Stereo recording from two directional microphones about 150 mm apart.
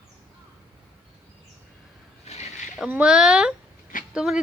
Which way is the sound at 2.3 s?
50° left (ahead or behind).